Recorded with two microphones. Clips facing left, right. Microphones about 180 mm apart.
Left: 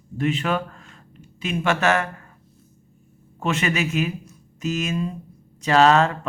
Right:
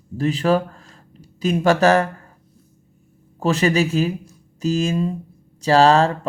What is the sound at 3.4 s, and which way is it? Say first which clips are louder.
Speech: right 6 dB; 35° right (ahead or behind).